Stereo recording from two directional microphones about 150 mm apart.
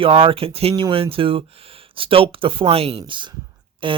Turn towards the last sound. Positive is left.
turn(degrees=-35)  # may be behind; listen again after turning